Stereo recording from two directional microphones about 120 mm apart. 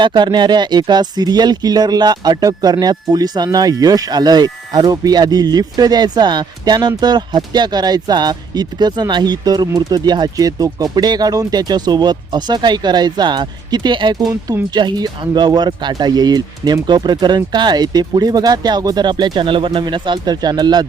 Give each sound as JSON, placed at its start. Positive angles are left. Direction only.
{"t": 0.0, "sound": "speech", "side_deg": -40}